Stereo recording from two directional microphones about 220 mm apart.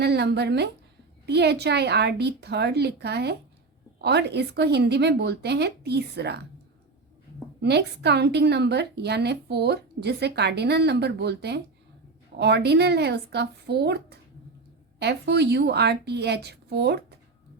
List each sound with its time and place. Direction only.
0.0 s a woman's voice: 50° right (ahead or behind)
7.6 s a woman's voice: 50° right (ahead or behind)